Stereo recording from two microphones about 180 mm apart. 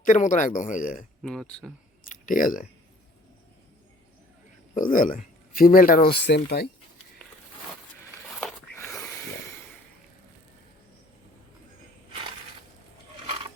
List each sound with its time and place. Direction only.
0.0 s speech: 45° left (ahead or behind)
1.2 s speech: 5° left (ahead or behind)
2.0 s speech: 50° left (ahead or behind)
4.7 s speech: 50° left (ahead or behind); by 6.7 s 65° left (ahead or behind)
8.3 s a sound: centre (ahead or behind)
8.8 s a sound: 15° left (ahead or behind)